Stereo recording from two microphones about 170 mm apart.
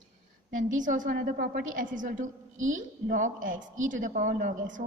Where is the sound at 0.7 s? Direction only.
50° right (ahead or behind).